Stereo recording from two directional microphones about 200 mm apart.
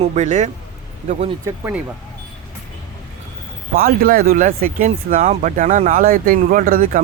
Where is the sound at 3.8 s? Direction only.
45° right (ahead or behind).